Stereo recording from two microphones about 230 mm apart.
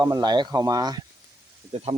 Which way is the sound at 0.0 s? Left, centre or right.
Centre.